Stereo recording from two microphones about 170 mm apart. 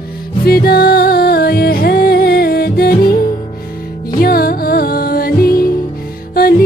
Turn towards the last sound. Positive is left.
turn(degrees=60)  # may be behind; listen again after turning